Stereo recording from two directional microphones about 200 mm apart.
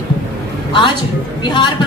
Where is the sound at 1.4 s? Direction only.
20° left (ahead or behind).